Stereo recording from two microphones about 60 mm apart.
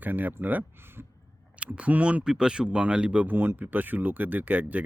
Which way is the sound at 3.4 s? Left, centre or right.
Right.